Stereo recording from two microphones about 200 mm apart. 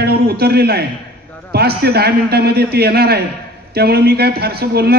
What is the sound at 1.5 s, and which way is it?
A man's voice, 50° right (ahead or behind).